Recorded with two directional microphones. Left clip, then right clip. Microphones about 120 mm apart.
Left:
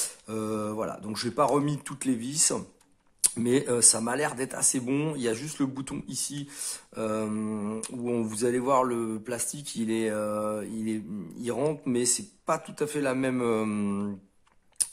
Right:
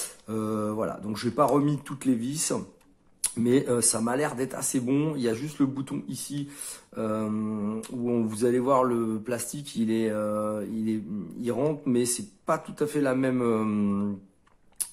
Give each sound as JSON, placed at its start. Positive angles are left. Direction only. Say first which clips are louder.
{"t": 0.0, "sound": "speech", "louder": "right 1 dB", "side_deg": 25}